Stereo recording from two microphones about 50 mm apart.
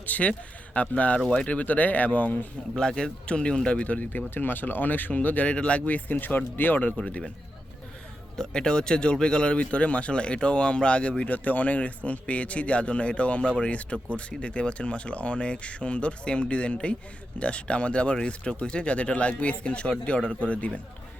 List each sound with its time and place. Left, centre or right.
0.0 s speech: left
2.7 s speech: centre
4.4 s speech: left
8.4 s speech: centre
11.2 s speech: left